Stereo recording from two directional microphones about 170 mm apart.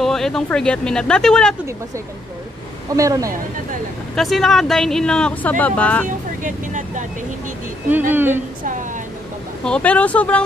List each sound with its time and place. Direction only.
0.0 s speech: centre (ahead or behind)
3.0 s speech: 20° right (ahead or behind)
4.1 s speech: centre (ahead or behind)
6.0 s speech: 50° right (ahead or behind)
8.1 s a woman's voice: 10° right (ahead or behind)
9.7 s speech: 5° left (ahead or behind)